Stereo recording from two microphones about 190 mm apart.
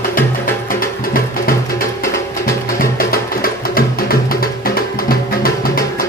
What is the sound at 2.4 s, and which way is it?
Music, 50° left (ahead or behind).